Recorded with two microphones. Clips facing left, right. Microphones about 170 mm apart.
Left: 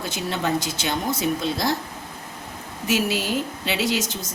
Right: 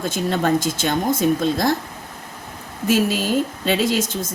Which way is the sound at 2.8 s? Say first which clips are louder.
Right 4 dB; 50° right (ahead or behind).